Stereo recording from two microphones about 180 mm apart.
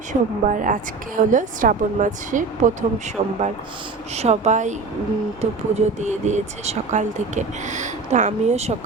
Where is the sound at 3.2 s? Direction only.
35° right (ahead or behind).